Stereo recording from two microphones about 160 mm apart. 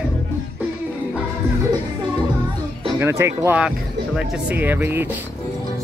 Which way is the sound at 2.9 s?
15° right (ahead or behind).